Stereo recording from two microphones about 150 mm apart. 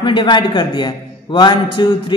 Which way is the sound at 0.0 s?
35° left (ahead or behind).